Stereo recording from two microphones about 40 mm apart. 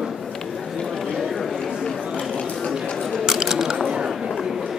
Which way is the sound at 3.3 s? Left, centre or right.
Centre.